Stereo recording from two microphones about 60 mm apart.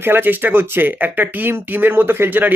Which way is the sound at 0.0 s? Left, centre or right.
Right.